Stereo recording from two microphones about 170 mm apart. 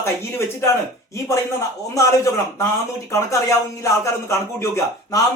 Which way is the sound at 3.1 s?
20° left (ahead or behind).